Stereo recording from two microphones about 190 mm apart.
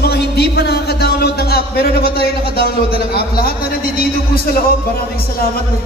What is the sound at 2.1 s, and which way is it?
A man's voice, 55° left (ahead or behind).